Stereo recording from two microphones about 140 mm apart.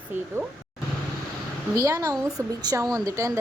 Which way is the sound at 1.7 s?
25° right (ahead or behind).